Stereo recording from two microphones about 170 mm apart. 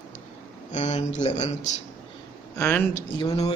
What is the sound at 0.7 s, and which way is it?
Speech, 45° left (ahead or behind).